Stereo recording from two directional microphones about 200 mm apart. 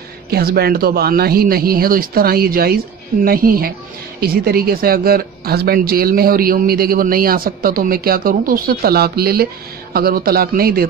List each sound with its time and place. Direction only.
0.3 s a woman's voice: 50° right (ahead or behind)